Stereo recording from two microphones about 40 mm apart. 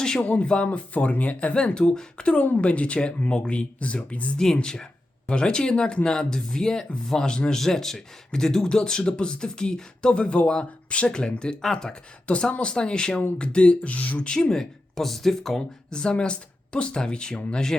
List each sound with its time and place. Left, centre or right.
0.2 s speech: left
1.5 s speech: centre; by 4.4 s left
4.6 s speech: centre
7.6 s speech: centre
12.5 s speech: left
14.2 s speech: left; by 15.5 s centre
15.5 s speech: centre